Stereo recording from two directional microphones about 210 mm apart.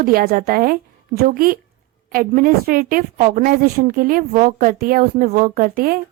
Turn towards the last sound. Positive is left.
turn(degrees=-45)  # may be behind; listen again after turning